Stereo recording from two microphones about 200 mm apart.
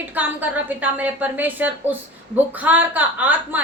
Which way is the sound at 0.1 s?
10° right (ahead or behind).